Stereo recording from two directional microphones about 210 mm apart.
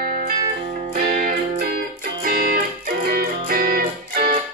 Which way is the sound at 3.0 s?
45° right (ahead or behind).